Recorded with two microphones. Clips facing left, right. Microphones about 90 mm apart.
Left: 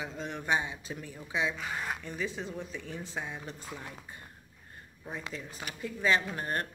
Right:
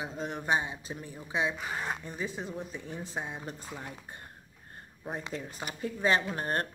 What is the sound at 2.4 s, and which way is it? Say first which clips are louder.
Speech: right 1 dB; 15° right (ahead or behind).